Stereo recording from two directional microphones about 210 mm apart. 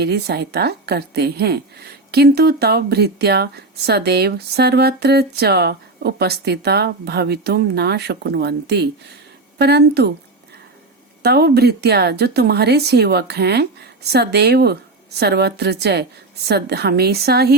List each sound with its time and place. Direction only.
0.0 s a woman's voice: 50° right (ahead or behind)
11.2 s a woman's voice: 50° right (ahead or behind)